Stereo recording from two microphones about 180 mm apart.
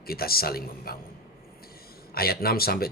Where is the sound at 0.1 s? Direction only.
55° left (ahead or behind).